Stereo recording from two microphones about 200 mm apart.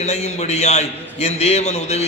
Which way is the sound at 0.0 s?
35° left (ahead or behind).